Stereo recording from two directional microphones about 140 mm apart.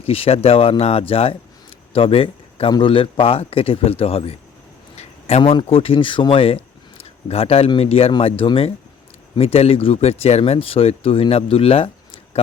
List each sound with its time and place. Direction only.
0.0 s speech: 45° left (ahead or behind)
4.9 s a sound: 50° left (ahead or behind)
5.5 s speech: 45° left (ahead or behind)